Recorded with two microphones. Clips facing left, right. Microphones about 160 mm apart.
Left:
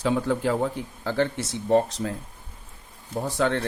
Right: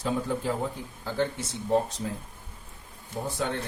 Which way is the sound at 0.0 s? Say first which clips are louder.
Left 5 dB; 75° left (ahead or behind).